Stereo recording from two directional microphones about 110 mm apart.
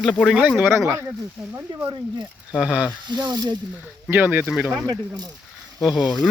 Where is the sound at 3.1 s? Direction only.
40° right (ahead or behind).